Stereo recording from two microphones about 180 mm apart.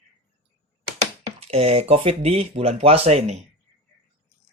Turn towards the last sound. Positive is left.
turn(degrees=-35)  # may be behind; listen again after turning